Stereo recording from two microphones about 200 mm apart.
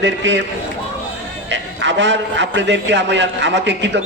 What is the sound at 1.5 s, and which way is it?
A man's voice, 65° right (ahead or behind).